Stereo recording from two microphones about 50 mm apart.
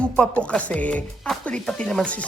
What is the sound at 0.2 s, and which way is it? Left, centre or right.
Speech, left.